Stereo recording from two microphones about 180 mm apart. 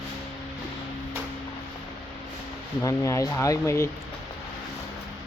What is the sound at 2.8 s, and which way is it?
Speech, 15° left (ahead or behind).